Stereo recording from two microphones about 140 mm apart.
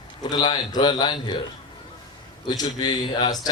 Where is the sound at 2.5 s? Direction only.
30° left (ahead or behind).